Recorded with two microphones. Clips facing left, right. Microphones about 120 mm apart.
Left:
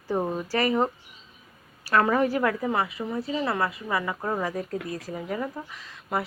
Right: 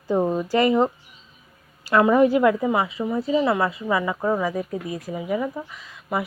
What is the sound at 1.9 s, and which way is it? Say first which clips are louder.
A woman's voice: right 6 dB; 15° right (ahead or behind).